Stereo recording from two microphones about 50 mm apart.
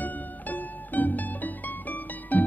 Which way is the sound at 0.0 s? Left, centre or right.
Left.